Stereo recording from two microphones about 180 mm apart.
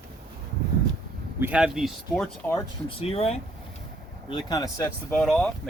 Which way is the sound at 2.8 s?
35° left (ahead or behind).